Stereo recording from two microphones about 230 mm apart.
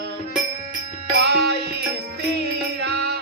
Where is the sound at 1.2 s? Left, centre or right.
Right.